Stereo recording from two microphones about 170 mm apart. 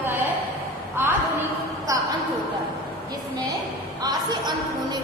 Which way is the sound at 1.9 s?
20° right (ahead or behind).